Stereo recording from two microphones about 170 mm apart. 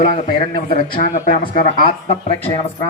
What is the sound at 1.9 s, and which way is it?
Speech, 35° left (ahead or behind).